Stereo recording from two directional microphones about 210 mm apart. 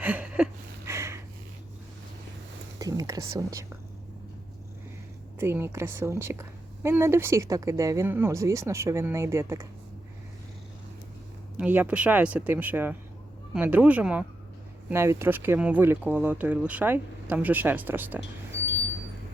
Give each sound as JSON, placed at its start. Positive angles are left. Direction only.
{"t": 0.0, "sound": "a sound", "side_deg": -5}
{"t": 0.9, "sound": "snort", "side_deg": -15}
{"t": 2.7, "sound": "speech", "side_deg": -15}
{"t": 5.4, "sound": "speech", "side_deg": -10}
{"t": 11.5, "sound": "speech", "side_deg": -10}